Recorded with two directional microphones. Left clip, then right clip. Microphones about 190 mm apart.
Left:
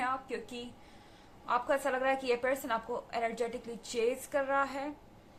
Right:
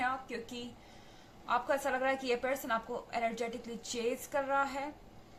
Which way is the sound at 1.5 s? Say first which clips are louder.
Left 1 dB; 20° left (ahead or behind).